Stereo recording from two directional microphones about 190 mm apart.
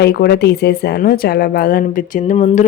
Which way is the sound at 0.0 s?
60° left (ahead or behind).